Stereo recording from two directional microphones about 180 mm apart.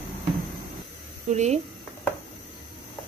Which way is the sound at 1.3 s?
40° right (ahead or behind).